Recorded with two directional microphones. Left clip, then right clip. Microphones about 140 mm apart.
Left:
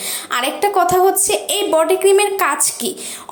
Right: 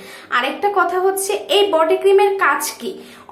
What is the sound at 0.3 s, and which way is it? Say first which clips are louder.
A woman's voice: even; 35° left (ahead or behind).